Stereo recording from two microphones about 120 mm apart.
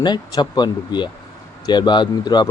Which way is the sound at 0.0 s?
35° left (ahead or behind).